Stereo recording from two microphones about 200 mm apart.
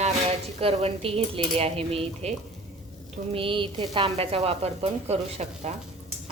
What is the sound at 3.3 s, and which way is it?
A woman's voice, 25° right (ahead or behind).